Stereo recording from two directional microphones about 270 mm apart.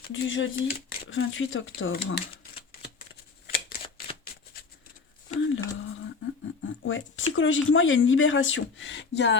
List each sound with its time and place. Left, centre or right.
0.1 s speech: left
5.4 s speech: left
6.8 s speech: left